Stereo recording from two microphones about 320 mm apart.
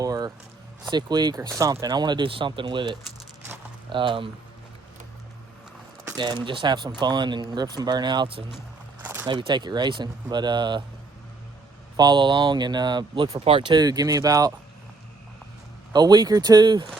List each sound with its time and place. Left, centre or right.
0.0 s a sound: centre
0.9 s speech: centre
3.5 s a sound: centre
6.1 s speech: centre
11.9 s speech: centre
15.9 s speech: centre